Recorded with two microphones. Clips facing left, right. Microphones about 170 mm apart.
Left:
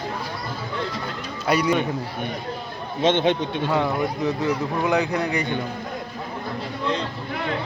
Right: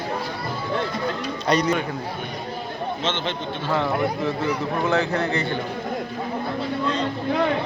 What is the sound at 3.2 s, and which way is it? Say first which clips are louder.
Speech: left 5 dB; 15° left (ahead or behind).